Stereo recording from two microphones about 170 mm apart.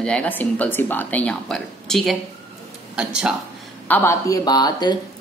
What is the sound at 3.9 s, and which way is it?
Speech, 15° left (ahead or behind).